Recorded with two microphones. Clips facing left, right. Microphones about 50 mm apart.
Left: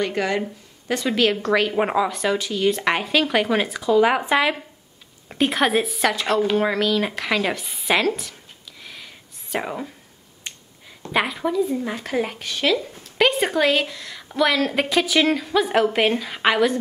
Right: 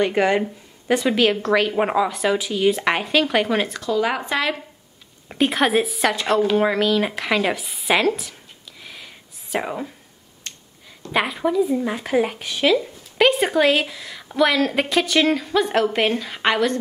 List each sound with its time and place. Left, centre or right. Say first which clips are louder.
0.0 s speech: right 4 dB; right; by 4.6 s centre
5.3 s speech: right 1 dB; centre
8.8 s whispering: right 1 dB; centre
11.1 s speech: right 1 dB; centre